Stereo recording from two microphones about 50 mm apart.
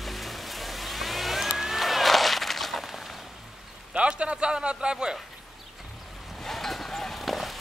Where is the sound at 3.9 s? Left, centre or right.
Right.